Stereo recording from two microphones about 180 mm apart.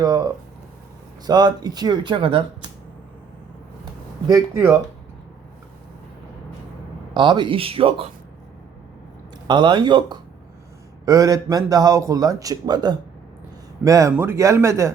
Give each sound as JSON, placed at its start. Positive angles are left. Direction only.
{"t": 0.0, "sound": "a man's voice", "side_deg": -20}
{"t": 1.3, "sound": "a man's voice", "side_deg": -25}
{"t": 4.3, "sound": "a man's voice", "side_deg": -20}
{"t": 7.1, "sound": "a man's voice", "side_deg": -25}
{"t": 9.5, "sound": "a man's voice", "side_deg": -25}